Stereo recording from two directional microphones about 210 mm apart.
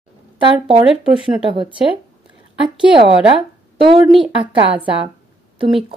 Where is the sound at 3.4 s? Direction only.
25° right (ahead or behind).